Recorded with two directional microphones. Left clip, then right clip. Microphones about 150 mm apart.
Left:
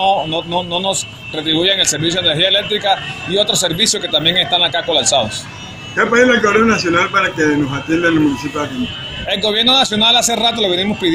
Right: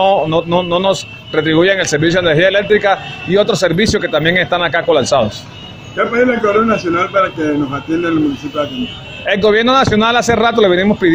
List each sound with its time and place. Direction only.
0.0 s speech: 45° right (ahead or behind)
5.9 s a man's voice: 5° left (ahead or behind)
9.3 s speech: 45° right (ahead or behind)